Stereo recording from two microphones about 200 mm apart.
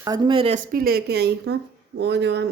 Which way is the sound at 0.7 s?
50° right (ahead or behind).